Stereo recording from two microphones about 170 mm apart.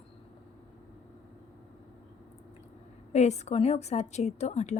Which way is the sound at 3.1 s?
40° left (ahead or behind).